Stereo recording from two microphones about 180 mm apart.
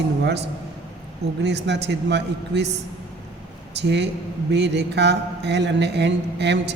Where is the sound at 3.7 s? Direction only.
70° right (ahead or behind).